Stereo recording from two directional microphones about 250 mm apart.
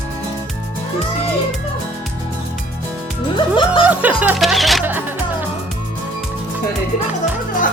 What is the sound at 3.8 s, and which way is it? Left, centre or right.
Speech, centre.